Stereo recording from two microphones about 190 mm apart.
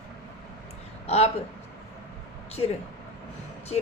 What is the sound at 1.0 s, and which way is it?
Speech, 35° left (ahead or behind).